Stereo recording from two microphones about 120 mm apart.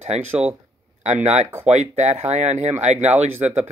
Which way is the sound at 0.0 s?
65° right (ahead or behind).